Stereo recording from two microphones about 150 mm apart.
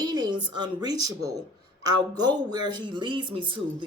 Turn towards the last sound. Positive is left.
turn(degrees=-35)  # may be behind; listen again after turning